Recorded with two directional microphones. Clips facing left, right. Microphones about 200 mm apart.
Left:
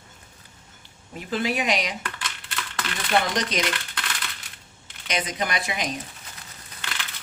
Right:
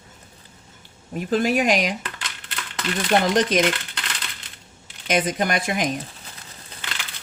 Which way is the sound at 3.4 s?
50° right (ahead or behind).